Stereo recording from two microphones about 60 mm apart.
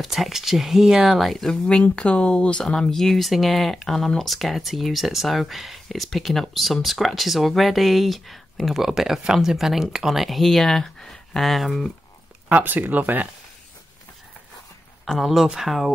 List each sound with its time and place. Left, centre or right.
0.0 s speech: centre
1.5 s speech: centre
12.4 s speech: right
15.0 s speech: centre